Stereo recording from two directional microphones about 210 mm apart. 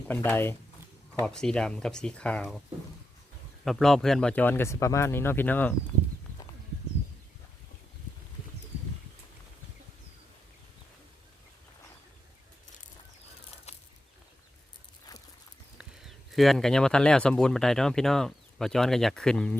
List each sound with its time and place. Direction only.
0.1 s speech: 10° left (ahead or behind)
3.6 s speech: centre (ahead or behind)
15.8 s speech: centre (ahead or behind)